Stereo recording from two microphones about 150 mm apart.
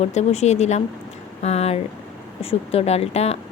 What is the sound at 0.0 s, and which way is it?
Speech, 50° left (ahead or behind).